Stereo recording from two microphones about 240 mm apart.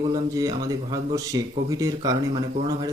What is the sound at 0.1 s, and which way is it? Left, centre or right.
Speech, centre.